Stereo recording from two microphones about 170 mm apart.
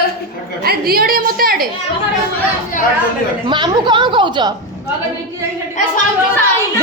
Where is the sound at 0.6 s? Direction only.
65° right (ahead or behind).